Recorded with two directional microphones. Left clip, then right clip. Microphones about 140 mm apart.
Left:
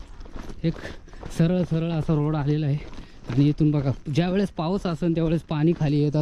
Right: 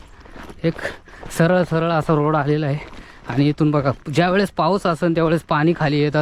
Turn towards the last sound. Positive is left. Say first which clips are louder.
# right 5 dB
turn(degrees=20)  # may be behind; listen again after turning